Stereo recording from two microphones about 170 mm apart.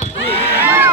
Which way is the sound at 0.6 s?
10° right (ahead or behind).